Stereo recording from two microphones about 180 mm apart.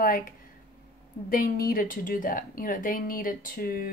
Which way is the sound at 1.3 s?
55° left (ahead or behind).